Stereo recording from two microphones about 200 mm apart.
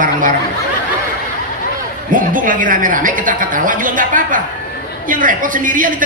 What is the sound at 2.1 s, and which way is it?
A man's voice, 45° right (ahead or behind).